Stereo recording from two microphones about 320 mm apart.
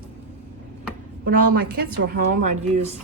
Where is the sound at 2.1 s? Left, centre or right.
Right.